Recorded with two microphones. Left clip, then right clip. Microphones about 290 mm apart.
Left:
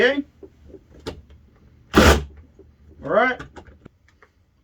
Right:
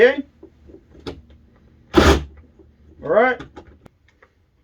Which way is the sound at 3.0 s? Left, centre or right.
Left.